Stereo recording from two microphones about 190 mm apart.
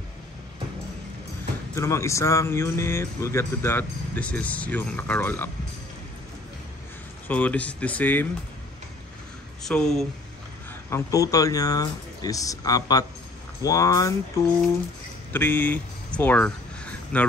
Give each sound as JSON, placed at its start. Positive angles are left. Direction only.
{"t": 1.8, "sound": "speech", "side_deg": 15}
{"t": 7.2, "sound": "speech", "side_deg": 10}
{"t": 9.6, "sound": "speech", "side_deg": 0}
{"t": 10.9, "sound": "speech", "side_deg": 15}